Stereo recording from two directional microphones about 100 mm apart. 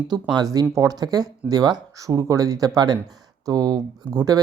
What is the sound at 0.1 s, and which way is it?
Speech, 45° right (ahead or behind).